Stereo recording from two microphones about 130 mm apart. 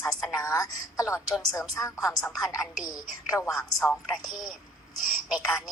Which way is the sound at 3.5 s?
5° left (ahead or behind).